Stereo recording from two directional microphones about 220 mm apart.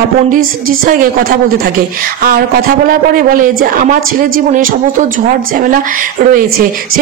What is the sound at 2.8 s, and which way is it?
Speech, 40° right (ahead or behind).